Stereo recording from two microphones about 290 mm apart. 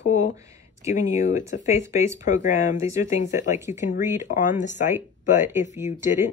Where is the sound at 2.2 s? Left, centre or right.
Left.